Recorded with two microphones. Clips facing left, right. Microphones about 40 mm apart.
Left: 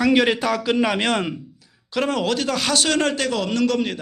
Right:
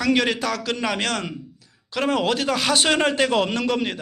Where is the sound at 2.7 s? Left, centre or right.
Centre.